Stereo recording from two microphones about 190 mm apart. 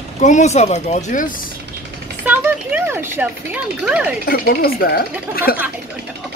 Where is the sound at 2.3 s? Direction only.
10° right (ahead or behind).